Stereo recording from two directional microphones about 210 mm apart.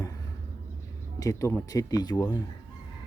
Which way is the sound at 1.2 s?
15° left (ahead or behind).